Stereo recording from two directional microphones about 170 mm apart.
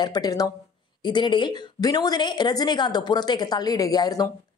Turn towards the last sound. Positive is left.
turn(degrees=20)  # may be behind; listen again after turning